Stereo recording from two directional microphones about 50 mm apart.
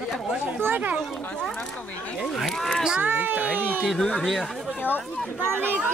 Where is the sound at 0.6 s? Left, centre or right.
Right.